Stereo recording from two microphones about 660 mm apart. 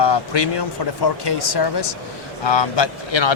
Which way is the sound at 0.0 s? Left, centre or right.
Left.